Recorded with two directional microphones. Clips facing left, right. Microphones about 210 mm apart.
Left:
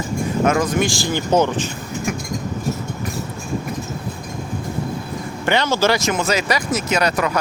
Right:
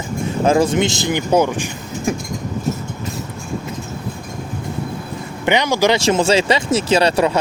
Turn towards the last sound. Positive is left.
turn(degrees=-30)  # may be behind; listen again after turning